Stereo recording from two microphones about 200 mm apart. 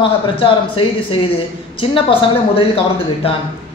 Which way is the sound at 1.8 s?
25° left (ahead or behind).